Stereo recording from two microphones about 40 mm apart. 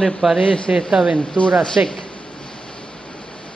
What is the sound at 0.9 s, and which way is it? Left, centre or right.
Speech, centre.